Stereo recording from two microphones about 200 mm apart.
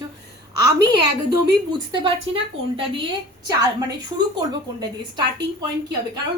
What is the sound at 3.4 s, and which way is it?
Speech, 20° right (ahead or behind).